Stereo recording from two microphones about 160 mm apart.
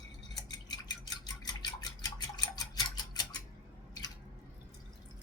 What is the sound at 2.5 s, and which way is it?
Clock, 25° left (ahead or behind).